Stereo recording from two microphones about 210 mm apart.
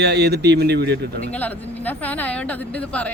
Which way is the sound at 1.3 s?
10° left (ahead or behind).